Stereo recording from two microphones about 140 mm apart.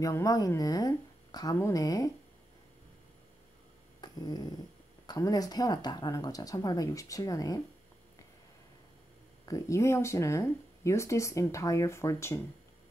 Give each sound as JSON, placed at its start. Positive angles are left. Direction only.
{"t": 0.0, "sound": "speech", "side_deg": 25}
{"t": 4.0, "sound": "dog", "side_deg": 30}
{"t": 5.0, "sound": "speech", "side_deg": 25}
{"t": 9.5, "sound": "speech", "side_deg": 20}